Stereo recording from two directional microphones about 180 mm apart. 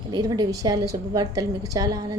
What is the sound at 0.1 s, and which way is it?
A woman's voice, 20° right (ahead or behind).